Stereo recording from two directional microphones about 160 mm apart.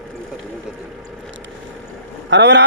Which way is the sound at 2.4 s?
90° right.